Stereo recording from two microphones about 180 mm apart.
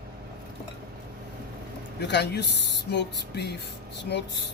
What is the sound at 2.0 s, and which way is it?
Speech, 65° left (ahead or behind).